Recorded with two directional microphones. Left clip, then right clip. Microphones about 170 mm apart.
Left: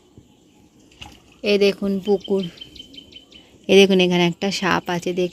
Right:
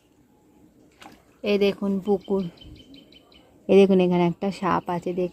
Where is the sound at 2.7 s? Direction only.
70° right (ahead or behind).